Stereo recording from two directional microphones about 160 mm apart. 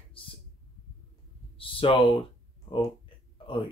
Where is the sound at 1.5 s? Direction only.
35° left (ahead or behind).